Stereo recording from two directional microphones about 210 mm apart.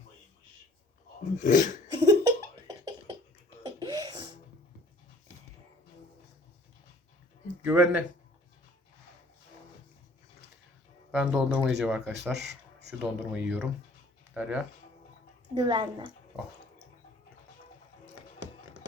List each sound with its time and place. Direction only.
1.4 s speech: 35° left (ahead or behind)
1.9 s laughter: 15° right (ahead or behind)
3.7 s beatboxing: 20° right (ahead or behind)
7.6 s speech: 5° right (ahead or behind)
11.1 s speech: 5° right (ahead or behind)
12.1 s speech: 55° right (ahead or behind)
13.0 s speech: 5° right (ahead or behind)
15.5 s a woman's voice: 20° right (ahead or behind)